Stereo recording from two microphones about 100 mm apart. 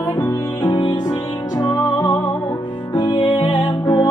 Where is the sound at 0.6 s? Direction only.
45° left (ahead or behind).